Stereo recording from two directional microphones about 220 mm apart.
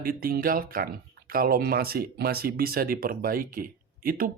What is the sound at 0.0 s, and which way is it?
Speech, 40° right (ahead or behind).